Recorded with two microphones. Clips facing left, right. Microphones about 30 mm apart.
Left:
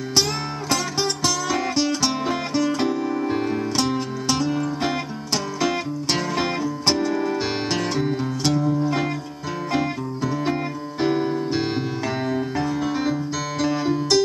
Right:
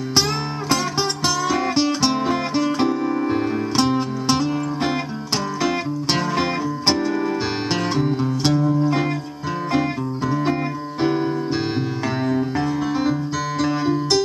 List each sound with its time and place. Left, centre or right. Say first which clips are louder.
0.7 s music: right 2 dB; centre
2.1 s music: right 2 dB; centre
3.7 s music: right 4 dB; centre